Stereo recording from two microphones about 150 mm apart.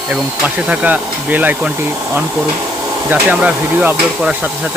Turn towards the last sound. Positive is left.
turn(degrees=-10)  # may be behind; listen again after turning